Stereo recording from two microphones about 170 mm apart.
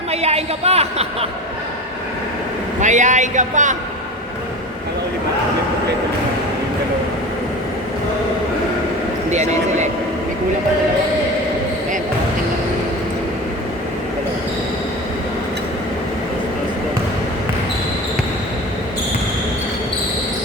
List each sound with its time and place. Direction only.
0.1 s a woman's voice: 40° right (ahead or behind)
2.8 s a man's voice: 45° right (ahead or behind)
9.3 s a man's voice: 45° right (ahead or behind)